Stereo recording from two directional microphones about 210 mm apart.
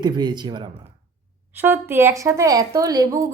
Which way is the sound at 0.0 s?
20° right (ahead or behind).